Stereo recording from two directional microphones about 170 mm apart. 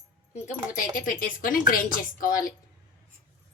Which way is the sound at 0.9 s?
55° left (ahead or behind).